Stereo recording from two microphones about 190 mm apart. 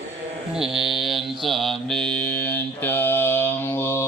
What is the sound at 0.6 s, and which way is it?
Mantra, centre (ahead or behind).